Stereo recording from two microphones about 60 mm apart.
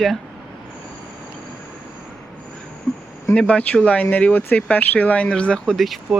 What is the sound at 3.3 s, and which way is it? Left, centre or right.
Speech, centre.